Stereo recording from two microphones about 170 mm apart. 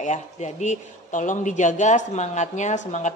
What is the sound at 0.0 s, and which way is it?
A man's voice, 45° left (ahead or behind).